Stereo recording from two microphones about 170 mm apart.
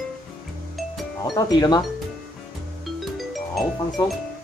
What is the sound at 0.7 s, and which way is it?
Music, centre (ahead or behind).